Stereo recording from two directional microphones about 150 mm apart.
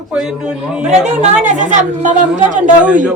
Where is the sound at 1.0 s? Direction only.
50° right (ahead or behind).